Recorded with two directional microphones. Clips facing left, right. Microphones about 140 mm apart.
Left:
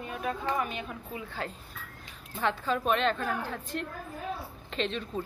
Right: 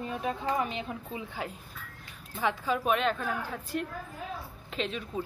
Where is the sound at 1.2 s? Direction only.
10° right (ahead or behind).